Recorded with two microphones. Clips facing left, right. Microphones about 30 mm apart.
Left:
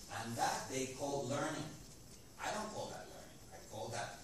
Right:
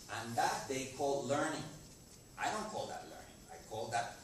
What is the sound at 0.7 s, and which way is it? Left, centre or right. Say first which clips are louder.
Speech: right 3 dB; centre.